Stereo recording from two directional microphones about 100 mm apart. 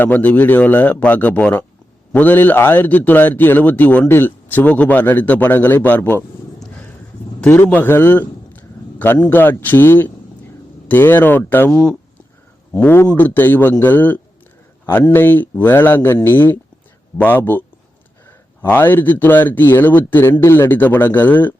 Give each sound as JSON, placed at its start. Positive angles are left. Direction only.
{"t": 0.0, "sound": "a man's voice", "side_deg": 15}
{"t": 7.7, "sound": "speech", "side_deg": 20}
{"t": 11.7, "sound": "a man's voice", "side_deg": 10}
{"t": 18.6, "sound": "speech", "side_deg": 20}